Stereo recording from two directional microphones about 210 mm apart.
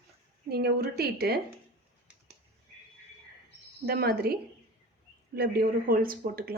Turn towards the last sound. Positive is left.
turn(degrees=-45)  # may be behind; listen again after turning